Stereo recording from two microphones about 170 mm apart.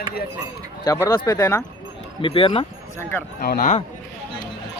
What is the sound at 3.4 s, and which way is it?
Speech, 60° left (ahead or behind).